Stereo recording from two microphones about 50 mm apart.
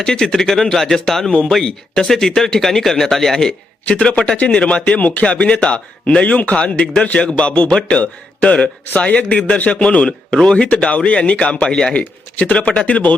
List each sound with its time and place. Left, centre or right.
0.0 s speech: centre
3.8 s speech: left
5.2 s speech: left
11.6 s speech: centre